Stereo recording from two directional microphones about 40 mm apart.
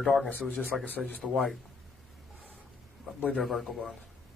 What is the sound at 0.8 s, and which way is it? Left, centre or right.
Speech, left.